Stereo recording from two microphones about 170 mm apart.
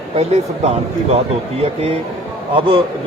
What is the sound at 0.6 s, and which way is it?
A man's voice, 45° right (ahead or behind).